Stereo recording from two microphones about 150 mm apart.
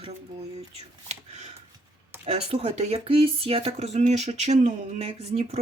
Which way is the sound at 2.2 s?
45° right (ahead or behind).